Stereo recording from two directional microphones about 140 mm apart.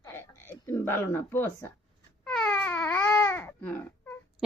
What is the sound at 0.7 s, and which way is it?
Speech, 15° left (ahead or behind).